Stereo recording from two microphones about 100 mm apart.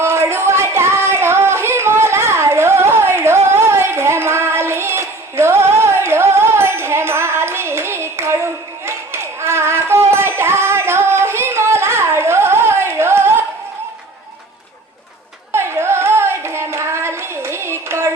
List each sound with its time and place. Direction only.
0.0 s music: 25° right (ahead or behind)
15.5 s child singing: 25° right (ahead or behind)